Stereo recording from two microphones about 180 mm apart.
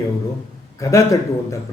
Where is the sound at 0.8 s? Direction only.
15° left (ahead or behind).